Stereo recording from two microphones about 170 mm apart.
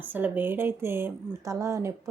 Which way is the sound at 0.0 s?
10° right (ahead or behind).